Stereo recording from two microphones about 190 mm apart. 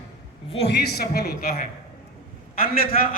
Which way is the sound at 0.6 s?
60° left (ahead or behind).